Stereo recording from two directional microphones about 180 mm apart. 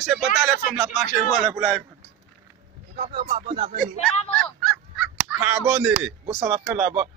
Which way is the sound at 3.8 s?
5° left (ahead or behind).